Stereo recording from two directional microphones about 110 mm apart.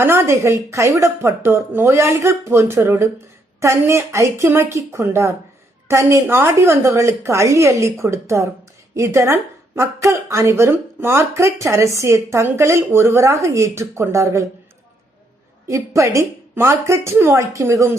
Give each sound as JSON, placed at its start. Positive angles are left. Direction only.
{"t": 0.0, "sound": "speech", "side_deg": -20}
{"t": 15.6, "sound": "speech", "side_deg": -25}